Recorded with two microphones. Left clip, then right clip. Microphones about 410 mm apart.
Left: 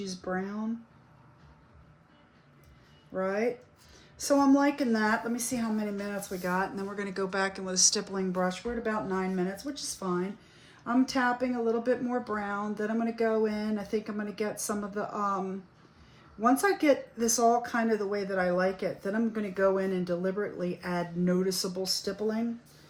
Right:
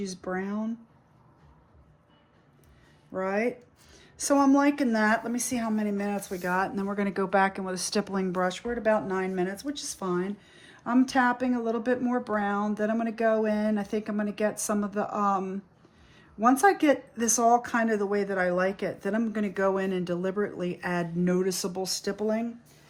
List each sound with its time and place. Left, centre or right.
0.3 s speech: right
3.2 s speech: right